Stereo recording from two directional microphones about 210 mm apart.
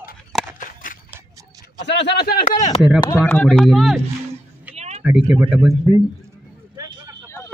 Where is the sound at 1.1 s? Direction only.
15° right (ahead or behind).